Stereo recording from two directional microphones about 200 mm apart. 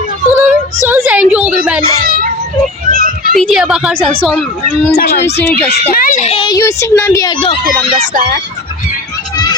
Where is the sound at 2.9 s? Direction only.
45° right (ahead or behind).